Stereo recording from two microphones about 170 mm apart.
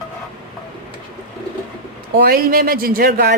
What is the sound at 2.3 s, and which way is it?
Speech, 60° right (ahead or behind).